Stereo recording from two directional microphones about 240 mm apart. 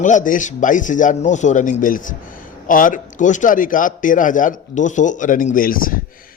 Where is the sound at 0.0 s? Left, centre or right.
Left.